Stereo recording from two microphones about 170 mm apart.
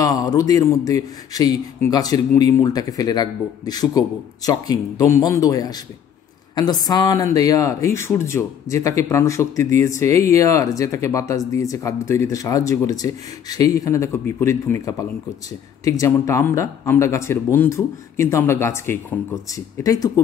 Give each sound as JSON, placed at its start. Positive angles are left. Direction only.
{"t": 0.0, "sound": "speech", "side_deg": 20}